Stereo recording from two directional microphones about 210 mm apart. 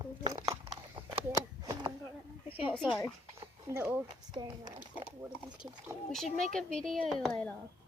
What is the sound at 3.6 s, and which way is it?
Speech, 10° right (ahead or behind).